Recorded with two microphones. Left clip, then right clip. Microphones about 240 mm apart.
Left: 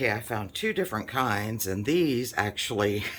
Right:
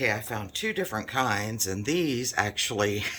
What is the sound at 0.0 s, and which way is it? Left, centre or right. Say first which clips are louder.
Speech: even; centre.